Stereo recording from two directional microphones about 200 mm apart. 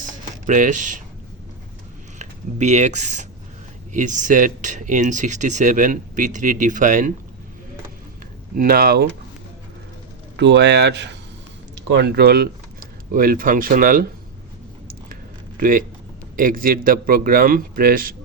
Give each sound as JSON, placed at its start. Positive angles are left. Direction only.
{"t": 0.0, "sound": "typing", "side_deg": -40}
{"t": 2.1, "sound": "speech", "side_deg": -35}
{"t": 8.5, "sound": "a man's voice", "side_deg": -50}
{"t": 10.3, "sound": "a man's voice", "side_deg": -60}
{"t": 15.1, "sound": "a sound", "side_deg": -45}
{"t": 16.4, "sound": "a man's voice", "side_deg": -45}